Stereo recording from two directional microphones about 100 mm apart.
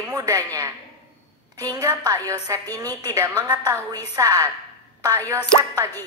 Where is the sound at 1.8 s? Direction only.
40° right (ahead or behind).